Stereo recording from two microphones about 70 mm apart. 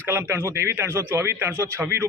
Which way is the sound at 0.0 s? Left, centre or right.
Right.